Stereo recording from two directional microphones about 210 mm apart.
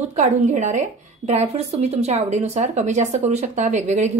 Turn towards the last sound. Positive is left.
turn(degrees=-35)  # may be behind; listen again after turning